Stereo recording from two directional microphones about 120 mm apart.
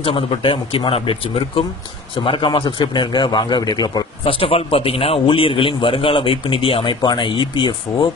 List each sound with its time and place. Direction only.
0.0 s a man's voice: 45° left (ahead or behind)
2.2 s a man's voice: 45° left (ahead or behind)
4.2 s a man's voice: 50° left (ahead or behind)